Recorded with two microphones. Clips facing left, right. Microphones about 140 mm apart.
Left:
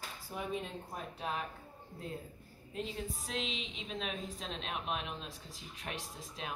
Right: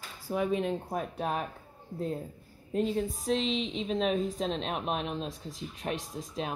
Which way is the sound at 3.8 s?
40° right (ahead or behind).